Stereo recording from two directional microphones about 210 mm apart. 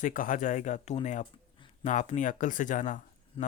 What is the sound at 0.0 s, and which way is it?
Speech, 40° left (ahead or behind).